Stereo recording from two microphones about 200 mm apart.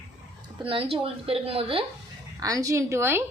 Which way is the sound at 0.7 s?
30° right (ahead or behind).